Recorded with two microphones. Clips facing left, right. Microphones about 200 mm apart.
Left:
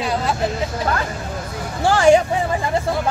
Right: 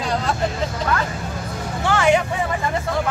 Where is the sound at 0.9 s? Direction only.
35° left (ahead or behind).